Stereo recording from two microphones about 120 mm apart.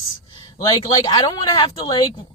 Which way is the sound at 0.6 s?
35° left (ahead or behind).